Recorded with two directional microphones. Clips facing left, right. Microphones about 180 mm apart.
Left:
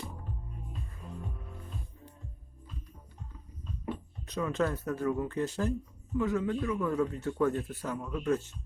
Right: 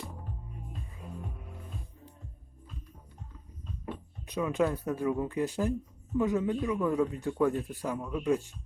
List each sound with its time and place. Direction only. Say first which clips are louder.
4.3 s a man's voice: right 2 dB; 10° right (ahead or behind)